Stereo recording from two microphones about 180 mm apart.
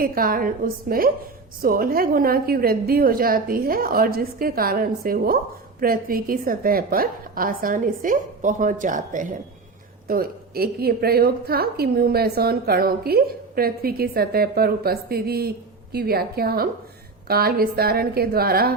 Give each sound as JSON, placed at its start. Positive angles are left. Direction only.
{"t": 0.0, "sound": "a woman's voice", "side_deg": -55}
{"t": 10.1, "sound": "a woman's voice", "side_deg": -55}